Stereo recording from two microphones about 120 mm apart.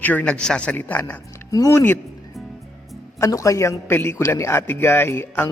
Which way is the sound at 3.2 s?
25° left (ahead or behind).